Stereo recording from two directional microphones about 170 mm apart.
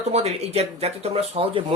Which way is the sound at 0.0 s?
40° right (ahead or behind).